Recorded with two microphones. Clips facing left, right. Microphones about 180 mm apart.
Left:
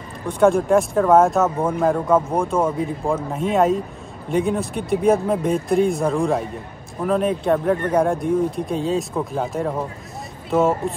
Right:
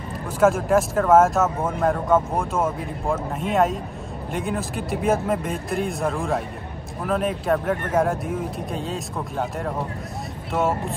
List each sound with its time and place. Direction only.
0.3 s speech: 5° right (ahead or behind)